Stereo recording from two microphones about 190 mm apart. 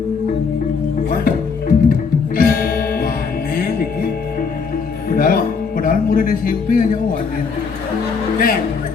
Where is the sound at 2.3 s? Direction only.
50° left (ahead or behind).